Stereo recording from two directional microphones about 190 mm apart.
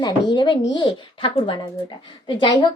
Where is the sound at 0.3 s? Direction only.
25° left (ahead or behind).